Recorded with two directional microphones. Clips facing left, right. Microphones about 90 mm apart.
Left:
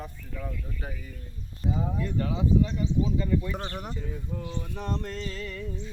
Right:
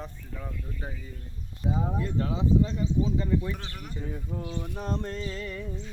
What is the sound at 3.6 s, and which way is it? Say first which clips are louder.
Speech: left 7 dB; 45° left (ahead or behind).